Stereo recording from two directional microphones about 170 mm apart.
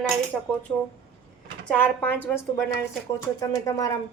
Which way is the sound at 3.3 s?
20° left (ahead or behind).